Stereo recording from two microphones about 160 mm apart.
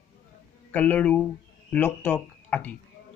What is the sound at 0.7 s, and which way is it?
Speech, 10° left (ahead or behind).